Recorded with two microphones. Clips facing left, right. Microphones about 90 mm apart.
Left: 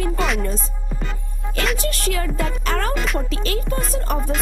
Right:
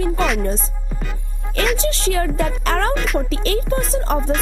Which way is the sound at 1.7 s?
25° right (ahead or behind).